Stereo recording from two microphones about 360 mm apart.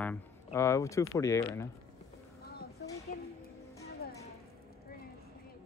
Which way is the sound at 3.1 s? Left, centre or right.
Left.